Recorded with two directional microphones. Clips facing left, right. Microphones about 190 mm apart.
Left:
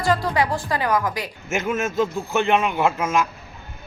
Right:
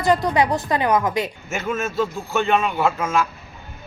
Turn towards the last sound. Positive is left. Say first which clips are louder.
# even
turn(degrees=20)  # may be behind; listen again after turning